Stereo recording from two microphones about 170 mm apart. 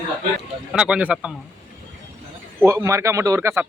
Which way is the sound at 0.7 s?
5° right (ahead or behind).